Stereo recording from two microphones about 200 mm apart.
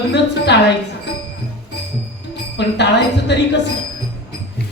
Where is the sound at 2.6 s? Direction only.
60° left (ahead or behind).